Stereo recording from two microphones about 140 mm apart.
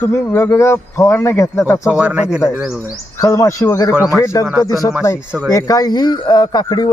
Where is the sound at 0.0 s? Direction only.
20° left (ahead or behind).